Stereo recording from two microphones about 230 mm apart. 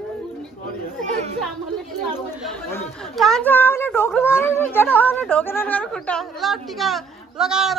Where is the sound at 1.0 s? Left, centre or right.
Right.